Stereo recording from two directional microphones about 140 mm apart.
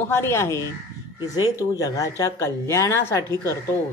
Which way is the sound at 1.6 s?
25° left (ahead or behind).